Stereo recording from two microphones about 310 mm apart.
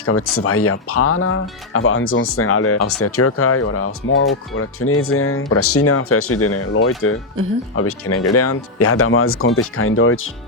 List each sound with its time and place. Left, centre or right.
0.0 s speech: left